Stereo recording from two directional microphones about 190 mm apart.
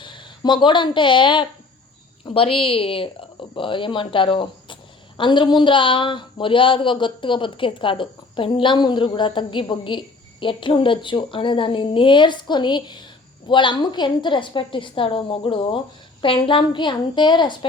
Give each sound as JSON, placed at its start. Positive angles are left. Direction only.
{"t": 0.0, "sound": "speech", "side_deg": 25}